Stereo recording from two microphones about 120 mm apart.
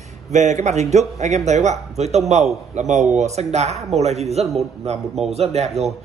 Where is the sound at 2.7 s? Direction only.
80° right.